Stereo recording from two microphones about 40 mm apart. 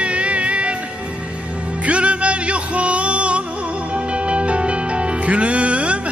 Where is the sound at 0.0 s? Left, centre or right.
Right.